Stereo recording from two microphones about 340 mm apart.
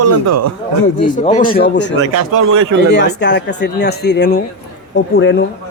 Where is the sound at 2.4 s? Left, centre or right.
Right.